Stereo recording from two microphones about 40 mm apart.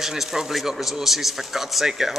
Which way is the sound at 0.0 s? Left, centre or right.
Centre.